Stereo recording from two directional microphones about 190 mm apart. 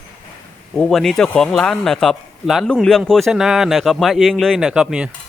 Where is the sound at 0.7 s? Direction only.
5° left (ahead or behind).